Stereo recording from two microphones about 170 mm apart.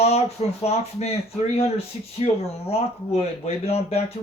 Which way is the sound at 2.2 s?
40° left (ahead or behind).